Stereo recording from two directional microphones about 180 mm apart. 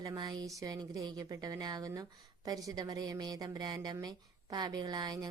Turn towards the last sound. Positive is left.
turn(degrees=-20)  # may be behind; listen again after turning